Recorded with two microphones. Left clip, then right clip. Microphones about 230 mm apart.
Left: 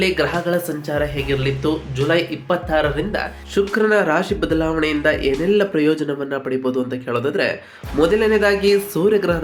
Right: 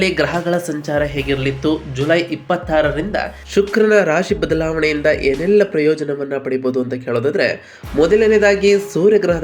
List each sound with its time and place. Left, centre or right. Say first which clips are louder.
0.3 s a man's voice: right 2 dB; centre